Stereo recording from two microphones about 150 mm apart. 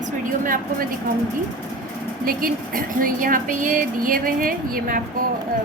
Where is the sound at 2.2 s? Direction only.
70° right (ahead or behind).